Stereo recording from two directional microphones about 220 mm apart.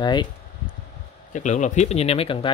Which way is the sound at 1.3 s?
35° left (ahead or behind).